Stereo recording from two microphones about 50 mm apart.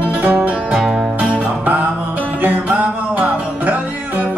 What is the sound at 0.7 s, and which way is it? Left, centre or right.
Music, centre.